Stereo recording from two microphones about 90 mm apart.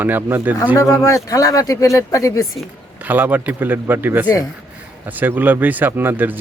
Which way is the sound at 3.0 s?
20° right (ahead or behind).